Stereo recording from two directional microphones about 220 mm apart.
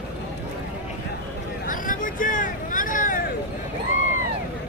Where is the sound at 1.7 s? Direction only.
40° left (ahead or behind).